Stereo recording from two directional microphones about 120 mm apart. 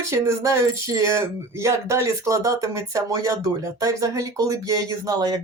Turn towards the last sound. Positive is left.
turn(degrees=-35)  # may be behind; listen again after turning